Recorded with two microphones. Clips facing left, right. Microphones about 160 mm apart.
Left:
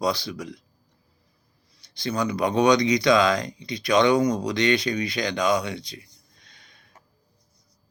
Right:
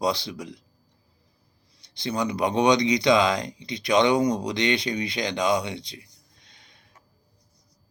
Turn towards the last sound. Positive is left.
turn(degrees=-20)  # may be behind; listen again after turning